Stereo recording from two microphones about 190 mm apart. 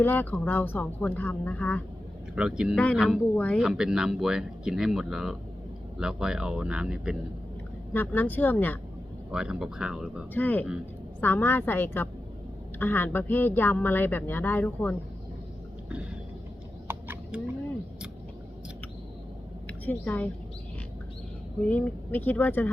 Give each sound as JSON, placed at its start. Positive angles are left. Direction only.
{"t": 0.0, "sound": "speech", "side_deg": 10}
{"t": 2.3, "sound": "speech", "side_deg": -5}
{"t": 7.9, "sound": "speech", "side_deg": 10}
{"t": 9.3, "sound": "speech", "side_deg": -5}
{"t": 10.3, "sound": "speech", "side_deg": 10}
{"t": 16.9, "sound": "a sound", "side_deg": -10}
{"t": 19.6, "sound": "a woman's voice", "side_deg": 10}
{"t": 21.7, "sound": "speech", "side_deg": 10}